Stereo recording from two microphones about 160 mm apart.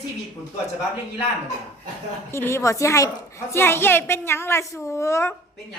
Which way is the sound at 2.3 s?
15° left (ahead or behind).